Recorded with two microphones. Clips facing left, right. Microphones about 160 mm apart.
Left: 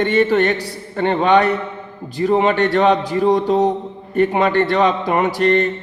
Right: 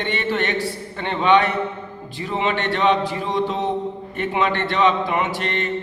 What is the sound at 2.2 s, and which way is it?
Mantra, 45° left (ahead or behind).